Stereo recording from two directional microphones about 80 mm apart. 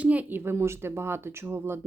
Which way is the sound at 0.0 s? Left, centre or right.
Centre.